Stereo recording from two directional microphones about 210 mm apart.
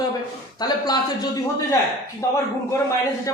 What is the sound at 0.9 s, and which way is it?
A man's voice, 20° left (ahead or behind).